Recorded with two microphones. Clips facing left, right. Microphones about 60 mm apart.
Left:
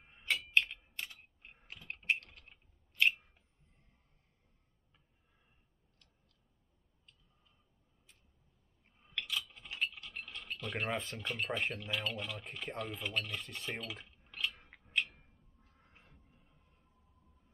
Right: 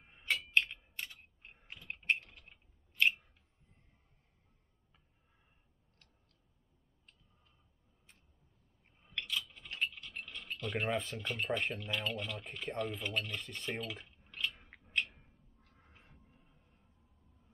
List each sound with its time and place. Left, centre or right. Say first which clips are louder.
0.0 s tick-tock: even; centre
0.6 s typing: left 1 dB; centre
9.0 s mechanisms: even; centre
16.0 s a sound: right 1 dB; centre